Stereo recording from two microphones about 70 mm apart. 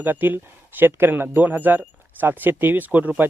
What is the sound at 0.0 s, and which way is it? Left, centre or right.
Speech, right.